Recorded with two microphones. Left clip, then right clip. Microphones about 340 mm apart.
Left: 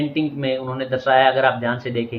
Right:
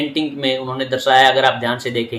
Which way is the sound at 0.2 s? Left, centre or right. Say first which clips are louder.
Right 3 dB; centre.